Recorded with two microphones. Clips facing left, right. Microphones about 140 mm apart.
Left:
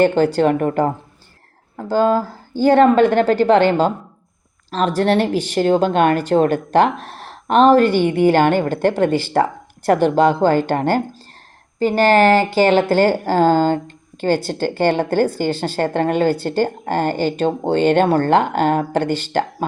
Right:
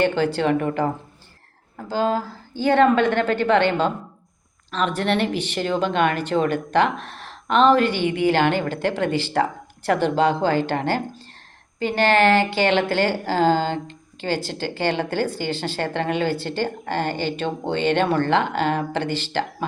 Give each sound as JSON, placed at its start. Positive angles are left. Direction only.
{"t": 0.0, "sound": "a woman's voice", "side_deg": 45}